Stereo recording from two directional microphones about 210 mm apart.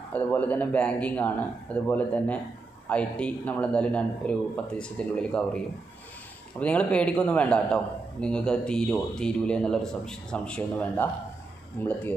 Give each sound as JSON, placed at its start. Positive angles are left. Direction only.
{"t": 0.1, "sound": "a man's voice", "side_deg": 10}
{"t": 6.6, "sound": "a man's voice", "side_deg": 5}